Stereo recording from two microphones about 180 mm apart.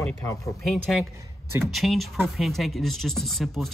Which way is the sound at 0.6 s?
Centre (ahead or behind).